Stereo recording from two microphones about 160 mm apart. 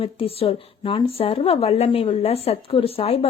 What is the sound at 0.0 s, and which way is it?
A woman's voice, 35° left (ahead or behind).